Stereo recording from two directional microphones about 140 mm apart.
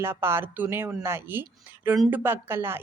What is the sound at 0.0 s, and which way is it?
A woman's voice, 15° right (ahead or behind).